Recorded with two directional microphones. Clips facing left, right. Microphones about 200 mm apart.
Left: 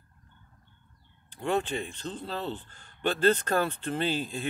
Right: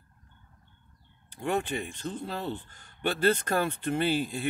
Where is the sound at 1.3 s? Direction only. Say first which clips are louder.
Left 1 dB; 10° right (ahead or behind).